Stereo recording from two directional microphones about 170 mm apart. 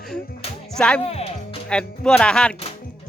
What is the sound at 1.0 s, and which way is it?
Music, 35° left (ahead or behind).